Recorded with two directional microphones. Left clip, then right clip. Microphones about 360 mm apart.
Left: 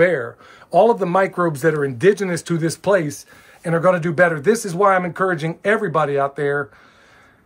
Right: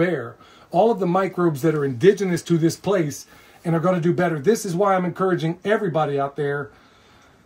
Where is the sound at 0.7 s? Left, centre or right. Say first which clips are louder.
Left 4 dB; centre.